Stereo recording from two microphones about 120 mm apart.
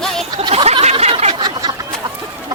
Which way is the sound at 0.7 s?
60° right (ahead or behind).